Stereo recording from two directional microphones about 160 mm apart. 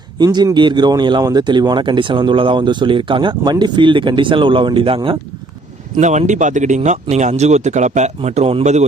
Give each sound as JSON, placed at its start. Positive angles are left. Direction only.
{"t": 0.2, "sound": "speech", "side_deg": -25}
{"t": 6.0, "sound": "speech", "side_deg": -50}